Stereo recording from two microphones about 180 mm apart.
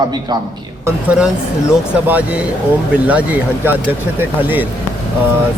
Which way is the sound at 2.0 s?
10° right (ahead or behind).